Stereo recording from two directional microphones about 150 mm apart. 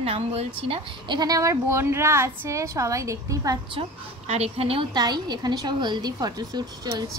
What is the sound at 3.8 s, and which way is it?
A woman's voice, 45° right (ahead or behind).